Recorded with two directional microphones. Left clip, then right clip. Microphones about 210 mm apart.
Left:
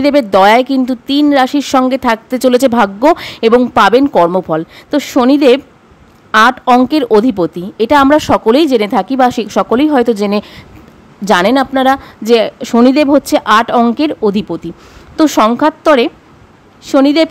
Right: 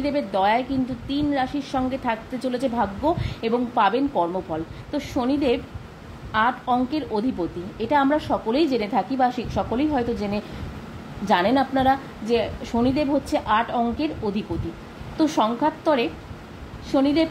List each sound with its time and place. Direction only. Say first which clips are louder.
0.0 s a woman's voice: left 14 dB; 50° left (ahead or behind)